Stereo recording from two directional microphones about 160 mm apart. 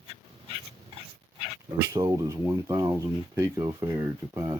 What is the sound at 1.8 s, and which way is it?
Speech, 20° right (ahead or behind).